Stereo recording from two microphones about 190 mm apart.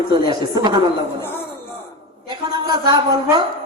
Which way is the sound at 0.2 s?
20° right (ahead or behind).